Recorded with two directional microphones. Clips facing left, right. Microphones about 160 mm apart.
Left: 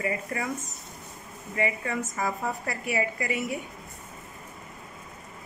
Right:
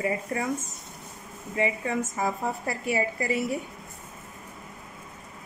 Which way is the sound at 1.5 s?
25° right (ahead or behind).